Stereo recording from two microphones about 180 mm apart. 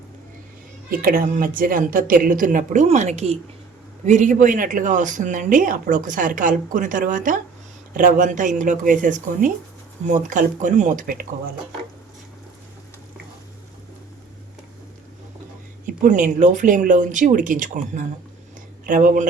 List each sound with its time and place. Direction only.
0.9 s speech: 50° right (ahead or behind)
15.9 s speech: 50° right (ahead or behind)